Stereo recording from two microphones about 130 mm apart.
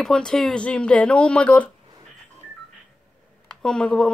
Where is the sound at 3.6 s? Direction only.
5° left (ahead or behind).